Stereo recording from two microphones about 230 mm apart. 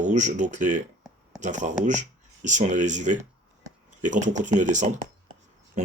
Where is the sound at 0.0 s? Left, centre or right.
Right.